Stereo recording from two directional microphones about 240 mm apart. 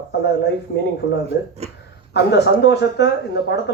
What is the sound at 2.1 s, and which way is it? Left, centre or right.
Speech, left.